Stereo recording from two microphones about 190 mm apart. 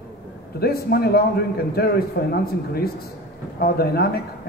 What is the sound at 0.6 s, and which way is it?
Speech, 55° left (ahead or behind).